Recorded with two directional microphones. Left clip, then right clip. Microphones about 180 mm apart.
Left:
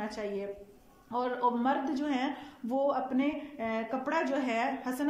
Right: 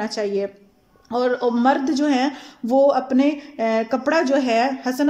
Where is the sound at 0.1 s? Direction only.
55° right (ahead or behind).